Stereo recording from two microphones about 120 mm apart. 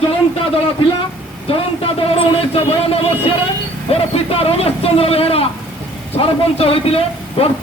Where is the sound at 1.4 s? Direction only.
50° left (ahead or behind).